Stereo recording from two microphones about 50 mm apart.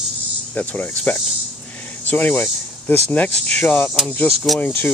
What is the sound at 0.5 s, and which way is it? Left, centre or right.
Speech, left.